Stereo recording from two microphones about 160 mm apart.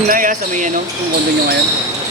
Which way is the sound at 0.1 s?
55° right (ahead or behind).